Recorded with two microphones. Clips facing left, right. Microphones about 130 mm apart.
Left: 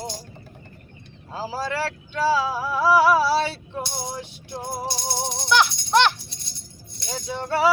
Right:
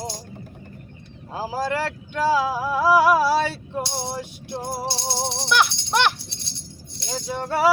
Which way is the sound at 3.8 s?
30° right (ahead or behind).